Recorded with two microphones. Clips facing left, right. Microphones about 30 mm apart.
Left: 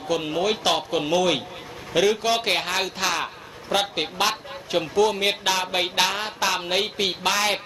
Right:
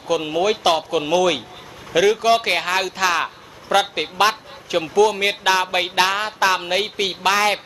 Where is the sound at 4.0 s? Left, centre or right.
Right.